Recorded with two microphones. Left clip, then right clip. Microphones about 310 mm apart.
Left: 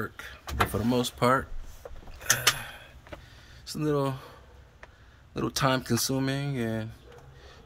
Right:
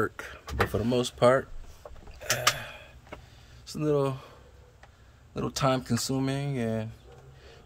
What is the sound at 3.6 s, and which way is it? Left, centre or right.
Speech, centre.